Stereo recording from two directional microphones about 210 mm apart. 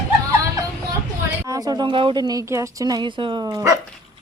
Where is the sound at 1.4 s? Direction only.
15° right (ahead or behind).